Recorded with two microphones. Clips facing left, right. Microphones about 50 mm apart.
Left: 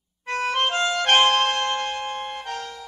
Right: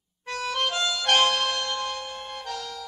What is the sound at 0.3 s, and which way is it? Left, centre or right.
Music, left.